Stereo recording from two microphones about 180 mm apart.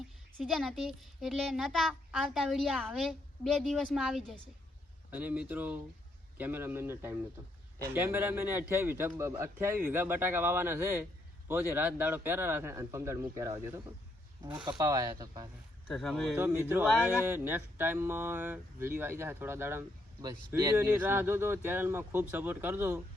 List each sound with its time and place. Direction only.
0.3 s a child's voice: centre (ahead or behind); by 15.4 s 20° right (ahead or behind)
15.9 s a child's voice: 5° left (ahead or behind)
16.4 s speech: 15° right (ahead or behind)